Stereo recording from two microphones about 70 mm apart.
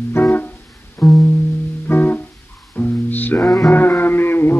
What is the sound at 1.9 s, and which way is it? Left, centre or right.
Music, left.